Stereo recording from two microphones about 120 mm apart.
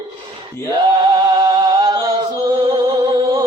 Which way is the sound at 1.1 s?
35° right (ahead or behind).